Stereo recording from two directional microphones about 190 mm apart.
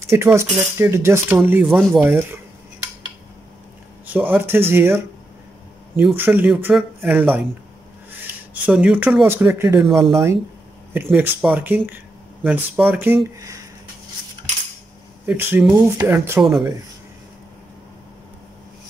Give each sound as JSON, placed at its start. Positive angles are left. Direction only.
{"t": 0.0, "sound": "speech", "side_deg": -15}
{"t": 4.1, "sound": "speech", "side_deg": -10}
{"t": 9.8, "sound": "speech", "side_deg": 0}
{"t": 15.2, "sound": "speech", "side_deg": -10}